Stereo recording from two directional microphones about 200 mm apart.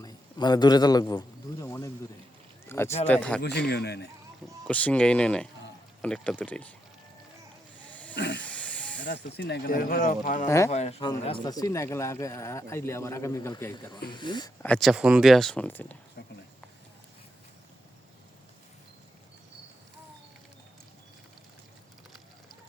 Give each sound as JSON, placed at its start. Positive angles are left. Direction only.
{"t": 0.0, "sound": "a man's voice", "side_deg": 20}
{"t": 1.6, "sound": "a sound", "side_deg": 15}
{"t": 2.6, "sound": "speech", "side_deg": 10}
{"t": 3.7, "sound": "speech", "side_deg": 55}
{"t": 4.6, "sound": "speech", "side_deg": 5}
{"t": 8.1, "sound": "hiss", "side_deg": 65}
{"t": 8.4, "sound": "hiss", "side_deg": 5}
{"t": 9.0, "sound": "speech", "side_deg": 60}
{"t": 11.4, "sound": "speech", "side_deg": 15}
{"t": 14.6, "sound": "speech", "side_deg": 5}
{"t": 16.2, "sound": "a sound", "side_deg": 55}